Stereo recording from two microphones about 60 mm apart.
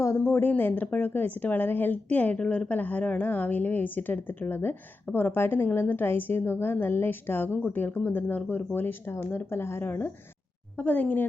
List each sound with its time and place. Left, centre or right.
0.2 s a woman's voice: left
10.8 s speech: left